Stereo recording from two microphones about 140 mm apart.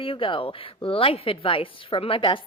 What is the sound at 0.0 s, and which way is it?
A woman's voice, 40° left (ahead or behind).